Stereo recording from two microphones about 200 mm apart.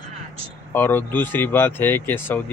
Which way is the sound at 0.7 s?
10° left (ahead or behind).